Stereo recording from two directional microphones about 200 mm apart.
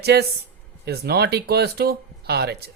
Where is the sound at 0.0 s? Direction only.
55° right (ahead or behind).